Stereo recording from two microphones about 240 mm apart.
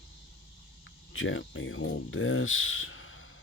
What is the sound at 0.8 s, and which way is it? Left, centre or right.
Speech, left.